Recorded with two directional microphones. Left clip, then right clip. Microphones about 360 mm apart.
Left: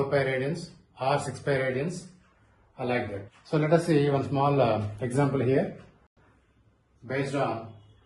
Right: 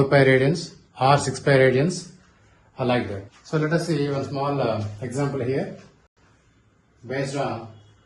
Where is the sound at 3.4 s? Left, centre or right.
Centre.